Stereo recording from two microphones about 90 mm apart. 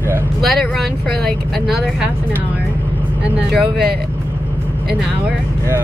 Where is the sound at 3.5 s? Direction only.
Centre (ahead or behind).